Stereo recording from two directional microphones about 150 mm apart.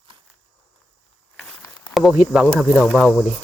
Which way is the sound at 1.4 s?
Centre (ahead or behind).